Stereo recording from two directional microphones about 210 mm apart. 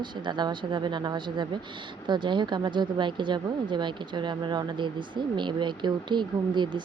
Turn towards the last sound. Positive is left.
turn(degrees=-20)  # may be behind; listen again after turning